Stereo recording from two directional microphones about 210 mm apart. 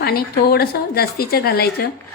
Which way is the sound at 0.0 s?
45° left (ahead or behind).